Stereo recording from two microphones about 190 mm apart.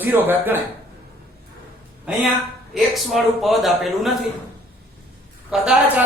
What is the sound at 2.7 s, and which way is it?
A man's voice, centre (ahead or behind).